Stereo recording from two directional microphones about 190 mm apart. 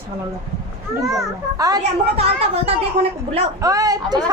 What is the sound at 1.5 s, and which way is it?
Speech, 20° right (ahead or behind).